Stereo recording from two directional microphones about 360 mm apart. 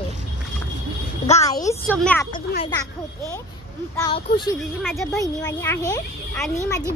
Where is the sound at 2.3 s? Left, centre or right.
Left.